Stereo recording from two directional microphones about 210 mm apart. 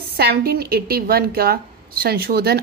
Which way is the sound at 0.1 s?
45° right (ahead or behind).